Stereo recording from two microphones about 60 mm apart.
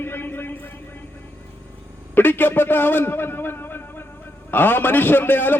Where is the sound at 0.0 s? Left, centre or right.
Left.